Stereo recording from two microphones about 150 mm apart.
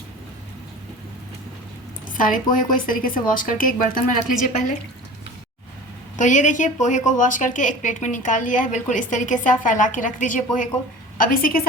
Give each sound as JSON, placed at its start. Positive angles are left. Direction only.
{"t": 2.0, "sound": "a woman's voice", "side_deg": 65}
{"t": 6.1, "sound": "a woman's voice", "side_deg": 55}
{"t": 11.2, "sound": "a woman's voice", "side_deg": 75}